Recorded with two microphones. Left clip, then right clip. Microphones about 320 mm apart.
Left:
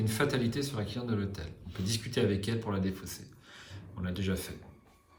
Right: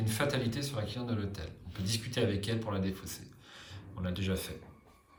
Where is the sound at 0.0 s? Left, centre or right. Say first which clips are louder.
Left 2 dB; centre.